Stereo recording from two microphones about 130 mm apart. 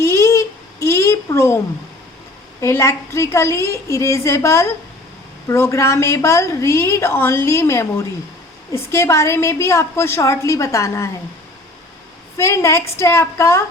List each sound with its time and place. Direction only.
0.0 s a sound: 20° left (ahead or behind)
2.6 s a woman's voice: 20° left (ahead or behind)
12.4 s a woman's voice: 20° left (ahead or behind)